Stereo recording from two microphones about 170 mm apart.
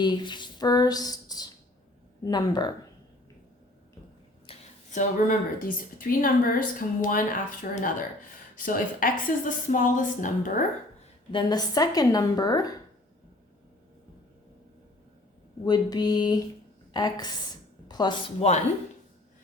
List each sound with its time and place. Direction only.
0.0 s a woman's voice: 25° left (ahead or behind)
4.4 s a sound: 45° left (ahead or behind)
5.6 s a woman's voice: 55° left (ahead or behind)
11.0 s a woman's voice: 30° left (ahead or behind)
15.6 s a woman's voice: 25° left (ahead or behind)